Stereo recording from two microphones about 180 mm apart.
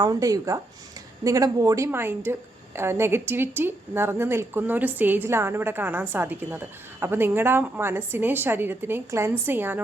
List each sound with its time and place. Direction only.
0.0 s a woman's voice: 20° right (ahead or behind)